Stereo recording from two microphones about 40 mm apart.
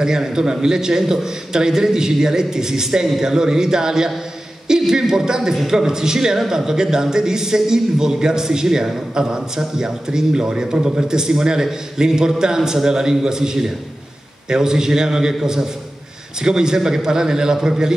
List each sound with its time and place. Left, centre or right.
0.0 s a man's voice: centre